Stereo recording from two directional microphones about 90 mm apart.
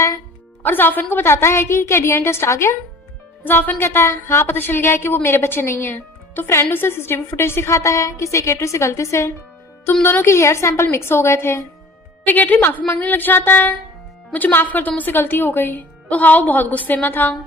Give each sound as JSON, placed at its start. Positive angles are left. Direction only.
{"t": 0.6, "sound": "a woman's voice", "side_deg": 20}